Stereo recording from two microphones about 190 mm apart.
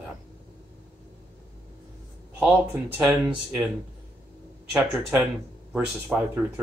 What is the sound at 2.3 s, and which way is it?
Speech, 10° right (ahead or behind).